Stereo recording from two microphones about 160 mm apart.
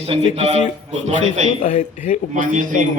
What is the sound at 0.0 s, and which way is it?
Speech, 40° right (ahead or behind).